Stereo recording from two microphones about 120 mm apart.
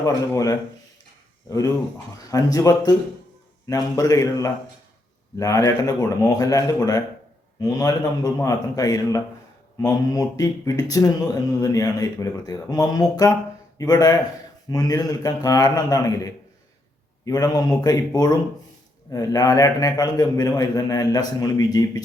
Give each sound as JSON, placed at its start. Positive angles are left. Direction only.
{"t": 0.0, "sound": "a man's voice", "side_deg": 30}